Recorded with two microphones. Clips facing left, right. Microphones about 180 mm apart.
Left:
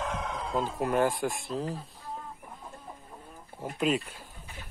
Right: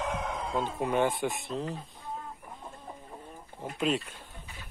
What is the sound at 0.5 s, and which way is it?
A man's voice, 5° left (ahead or behind).